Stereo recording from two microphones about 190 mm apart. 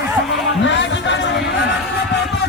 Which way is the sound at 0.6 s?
75° left (ahead or behind).